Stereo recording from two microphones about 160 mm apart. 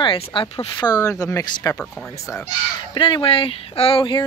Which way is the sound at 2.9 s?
30° left (ahead or behind).